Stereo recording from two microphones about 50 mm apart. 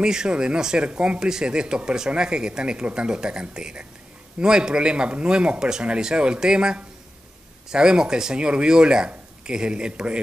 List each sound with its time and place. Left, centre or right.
0.0 s speech: centre